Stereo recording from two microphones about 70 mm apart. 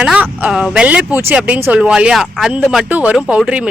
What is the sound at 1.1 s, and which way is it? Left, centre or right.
Speech, right.